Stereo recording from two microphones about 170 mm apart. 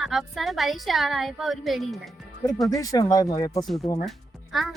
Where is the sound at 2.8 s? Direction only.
20° left (ahead or behind).